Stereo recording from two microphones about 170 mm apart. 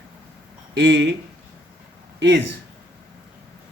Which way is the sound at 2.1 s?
90° right.